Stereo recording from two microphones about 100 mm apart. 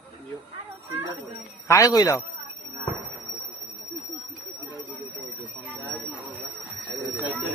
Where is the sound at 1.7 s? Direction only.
35° left (ahead or behind).